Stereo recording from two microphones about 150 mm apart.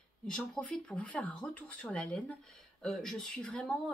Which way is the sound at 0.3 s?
5° left (ahead or behind).